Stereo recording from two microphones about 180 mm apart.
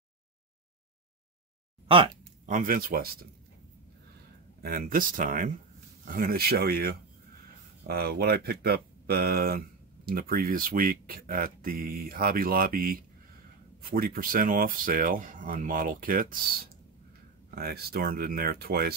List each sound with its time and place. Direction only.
1.9 s speech: 30° right (ahead or behind)
2.4 s speech: 50° right (ahead or behind)
4.6 s speech: 55° right (ahead or behind)